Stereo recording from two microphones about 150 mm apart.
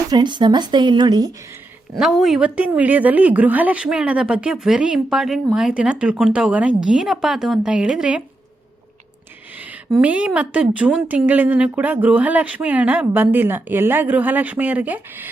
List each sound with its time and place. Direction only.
0.1 s speech: 30° right (ahead or behind)
2.0 s a woman's voice: centre (ahead or behind)
9.6 s a woman's voice: 10° right (ahead or behind)